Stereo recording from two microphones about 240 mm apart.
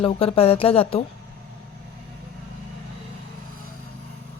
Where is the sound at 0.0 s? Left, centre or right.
Left.